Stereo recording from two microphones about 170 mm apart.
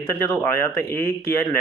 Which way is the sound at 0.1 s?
10° left (ahead or behind).